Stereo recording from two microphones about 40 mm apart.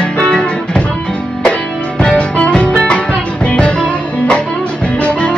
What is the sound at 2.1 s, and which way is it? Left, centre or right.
Music, left.